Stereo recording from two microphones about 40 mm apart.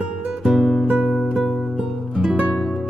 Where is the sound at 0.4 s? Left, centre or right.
Centre.